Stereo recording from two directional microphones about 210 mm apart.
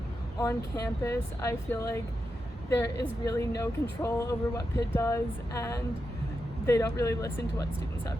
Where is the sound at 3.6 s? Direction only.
15° left (ahead or behind).